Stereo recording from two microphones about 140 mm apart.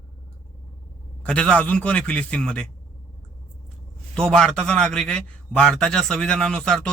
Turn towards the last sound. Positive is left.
turn(degrees=5)  # may be behind; listen again after turning